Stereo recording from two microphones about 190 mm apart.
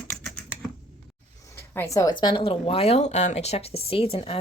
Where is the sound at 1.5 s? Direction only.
10° left (ahead or behind).